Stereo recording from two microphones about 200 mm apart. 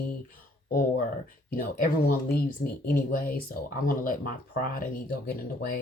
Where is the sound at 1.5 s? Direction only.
45° left (ahead or behind).